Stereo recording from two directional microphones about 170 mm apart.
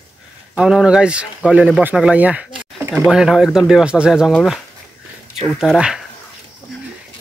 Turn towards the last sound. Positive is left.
turn(degrees=-5)  # may be behind; listen again after turning